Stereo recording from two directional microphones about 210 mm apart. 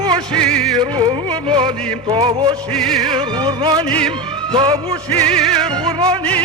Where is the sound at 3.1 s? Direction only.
20° right (ahead or behind).